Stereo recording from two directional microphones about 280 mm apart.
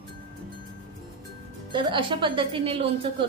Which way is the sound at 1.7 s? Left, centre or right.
Centre.